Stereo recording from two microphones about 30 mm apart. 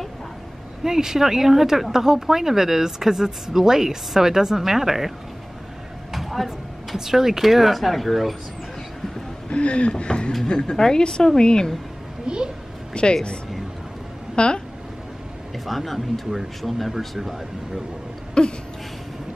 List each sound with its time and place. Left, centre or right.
0.8 s speech: centre
6.1 s speech: centre
9.5 s speech: left
10.7 s a woman's voice: left
12.3 s a child's voice: right
12.9 s speech: left
15.6 s speech: centre
18.4 s a woman's voice: left